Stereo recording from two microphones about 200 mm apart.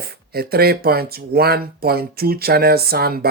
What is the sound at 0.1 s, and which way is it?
Speech, 50° right (ahead or behind).